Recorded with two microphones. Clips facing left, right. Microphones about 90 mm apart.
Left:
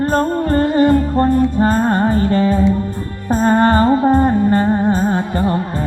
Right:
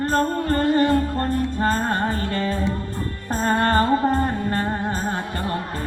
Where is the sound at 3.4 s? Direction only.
20° left (ahead or behind).